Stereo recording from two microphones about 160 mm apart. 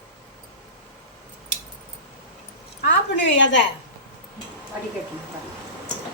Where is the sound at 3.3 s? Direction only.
90° left.